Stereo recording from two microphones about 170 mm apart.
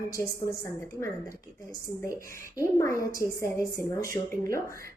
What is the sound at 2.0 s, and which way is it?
A woman's voice, 20° left (ahead or behind).